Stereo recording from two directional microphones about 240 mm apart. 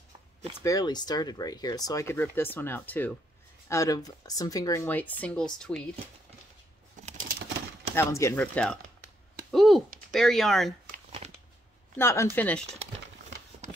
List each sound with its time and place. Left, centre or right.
0.6 s speech: centre
7.9 s speech: centre
11.2 s shuffling cards: right
12.0 s speech: centre